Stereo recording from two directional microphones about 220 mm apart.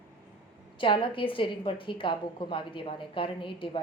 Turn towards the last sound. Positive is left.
turn(degrees=25)  # may be behind; listen again after turning